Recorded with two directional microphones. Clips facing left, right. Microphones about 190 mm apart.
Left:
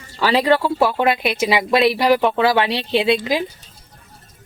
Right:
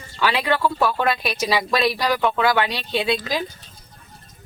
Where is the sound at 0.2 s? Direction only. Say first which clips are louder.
Left 5 dB; 35° left (ahead or behind).